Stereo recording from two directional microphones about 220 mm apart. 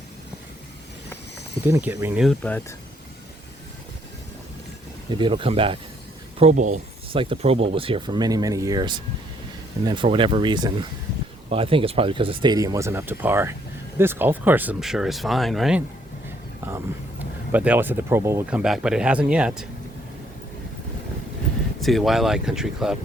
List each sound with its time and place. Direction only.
1.6 s speech: 10° right (ahead or behind)
2.4 s speech: 10° left (ahead or behind)
5.1 s speech: 20° right (ahead or behind); by 15.8 s centre (ahead or behind)
17.5 s speech: 5° right (ahead or behind)
21.8 s speech: centre (ahead or behind)